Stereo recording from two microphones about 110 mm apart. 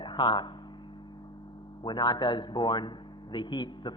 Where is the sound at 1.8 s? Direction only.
40° left (ahead or behind).